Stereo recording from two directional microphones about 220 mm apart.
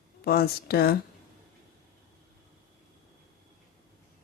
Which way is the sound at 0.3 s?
45° left (ahead or behind).